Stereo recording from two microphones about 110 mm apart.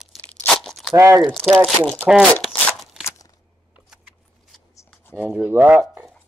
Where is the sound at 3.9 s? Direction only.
5° right (ahead or behind).